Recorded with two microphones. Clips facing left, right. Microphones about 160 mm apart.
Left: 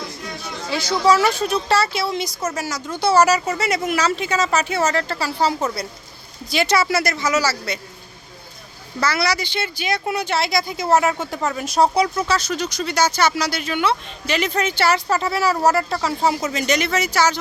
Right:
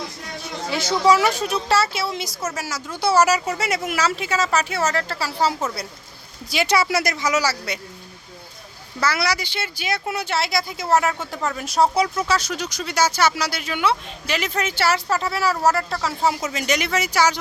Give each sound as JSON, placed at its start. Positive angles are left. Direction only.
{"t": 0.7, "sound": "speech", "side_deg": -20}
{"t": 1.2, "sound": "a woman's voice", "side_deg": -10}
{"t": 9.0, "sound": "speech", "side_deg": -10}